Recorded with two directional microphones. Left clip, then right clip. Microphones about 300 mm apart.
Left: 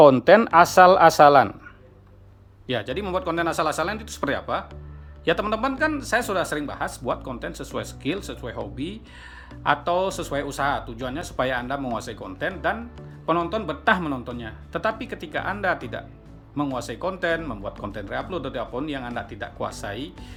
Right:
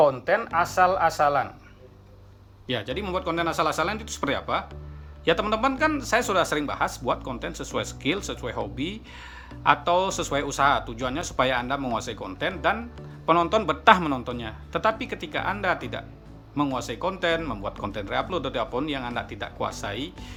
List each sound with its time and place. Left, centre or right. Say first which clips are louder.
0.0 s speech: left 7 dB; left
2.6 s speech: left 2 dB; centre